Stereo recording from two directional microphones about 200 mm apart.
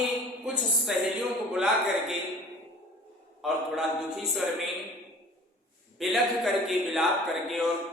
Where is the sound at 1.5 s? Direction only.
Centre (ahead or behind).